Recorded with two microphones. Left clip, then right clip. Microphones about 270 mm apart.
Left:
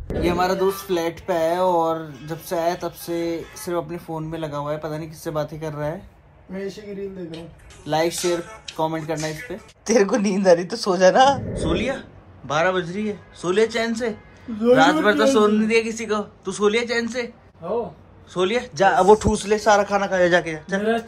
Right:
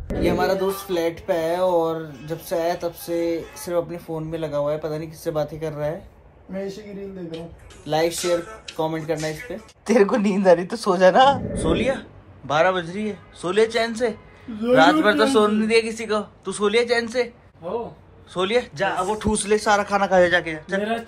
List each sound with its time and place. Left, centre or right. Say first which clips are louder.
0.1 s a man's voice: even; centre
7.8 s a man's voice: even; centre
18.3 s a man's voice: even; centre